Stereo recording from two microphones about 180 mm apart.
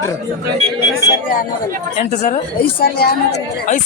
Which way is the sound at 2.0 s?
40° left (ahead or behind).